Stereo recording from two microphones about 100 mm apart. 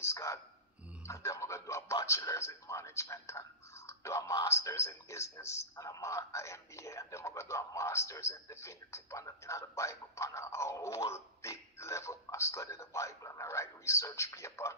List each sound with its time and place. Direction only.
0.0 s a sound: 30° left (ahead or behind)
1.0 s music: 30° left (ahead or behind)
2.0 s a man's voice: 30° left (ahead or behind)